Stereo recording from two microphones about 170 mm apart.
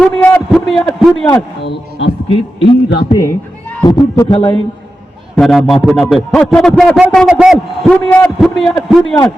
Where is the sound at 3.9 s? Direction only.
20° left (ahead or behind).